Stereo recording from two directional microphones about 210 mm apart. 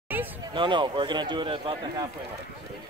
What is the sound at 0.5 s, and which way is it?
A man's voice, 20° right (ahead or behind).